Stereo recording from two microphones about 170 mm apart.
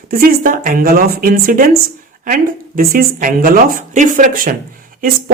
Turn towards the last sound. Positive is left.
turn(degrees=-55)  # may be behind; listen again after turning